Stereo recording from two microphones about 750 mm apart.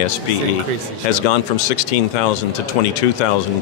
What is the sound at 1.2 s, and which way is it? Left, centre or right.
Speech, left.